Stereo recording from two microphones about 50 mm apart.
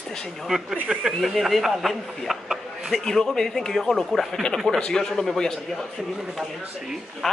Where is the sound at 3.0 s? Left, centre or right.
Centre.